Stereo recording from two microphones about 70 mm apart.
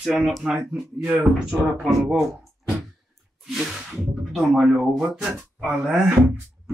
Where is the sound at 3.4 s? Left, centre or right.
Centre.